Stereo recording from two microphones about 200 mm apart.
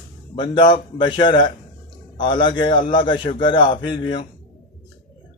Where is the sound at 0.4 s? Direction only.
25° left (ahead or behind).